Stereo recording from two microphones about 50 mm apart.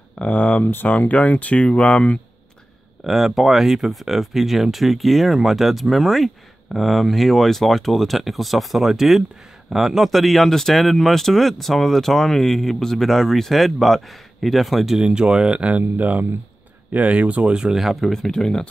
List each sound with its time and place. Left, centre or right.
0.2 s speech: left
0.7 s speech: left
0.9 s speech: left
3.0 s speech: centre
15.0 s speech: centre
17.7 s speech: centre
18.1 s speech: centre